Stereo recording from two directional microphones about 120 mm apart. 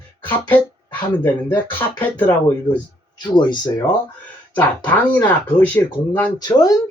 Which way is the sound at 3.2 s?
35° left (ahead or behind).